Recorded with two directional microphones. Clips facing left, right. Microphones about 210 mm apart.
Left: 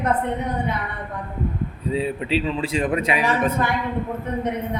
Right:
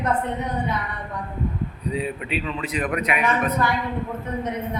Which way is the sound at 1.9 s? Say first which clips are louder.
Left 5 dB; 30° left (ahead or behind).